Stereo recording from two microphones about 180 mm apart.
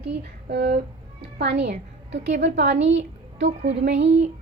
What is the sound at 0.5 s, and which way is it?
Speech, 60° right (ahead or behind).